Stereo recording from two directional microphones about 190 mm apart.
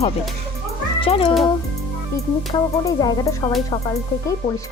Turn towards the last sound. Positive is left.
turn(degrees=15)  # may be behind; listen again after turning